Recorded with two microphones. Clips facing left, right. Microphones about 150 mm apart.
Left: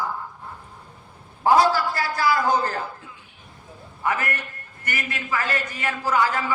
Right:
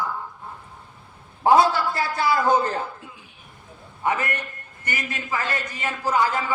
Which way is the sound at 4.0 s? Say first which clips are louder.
Right 1 dB; 20° right (ahead or behind).